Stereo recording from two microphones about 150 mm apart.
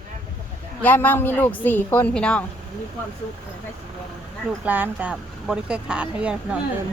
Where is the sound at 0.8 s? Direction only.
10° left (ahead or behind).